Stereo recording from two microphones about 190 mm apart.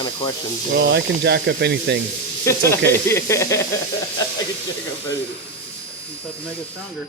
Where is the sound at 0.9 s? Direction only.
65° right (ahead or behind).